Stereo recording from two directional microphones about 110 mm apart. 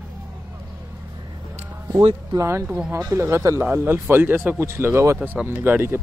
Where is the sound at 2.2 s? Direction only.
30° right (ahead or behind).